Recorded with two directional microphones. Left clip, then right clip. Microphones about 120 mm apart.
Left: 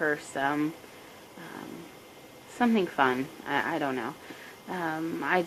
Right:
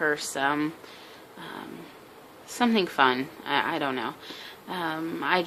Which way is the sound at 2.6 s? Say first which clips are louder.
Right 3 dB; 30° right (ahead or behind).